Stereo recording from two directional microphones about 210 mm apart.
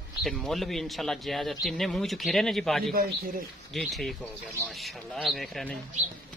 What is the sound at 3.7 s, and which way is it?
A man's voice, centre (ahead or behind).